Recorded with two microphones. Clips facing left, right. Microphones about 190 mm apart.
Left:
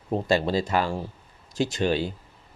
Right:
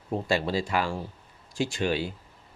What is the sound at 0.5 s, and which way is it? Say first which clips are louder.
Speech: left 3 dB; 40° left (ahead or behind).